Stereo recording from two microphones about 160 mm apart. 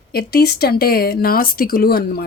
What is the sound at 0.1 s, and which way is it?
Speech, 75° left (ahead or behind).